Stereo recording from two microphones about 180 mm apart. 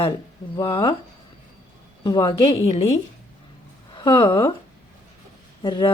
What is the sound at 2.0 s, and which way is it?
Speech, 25° left (ahead or behind).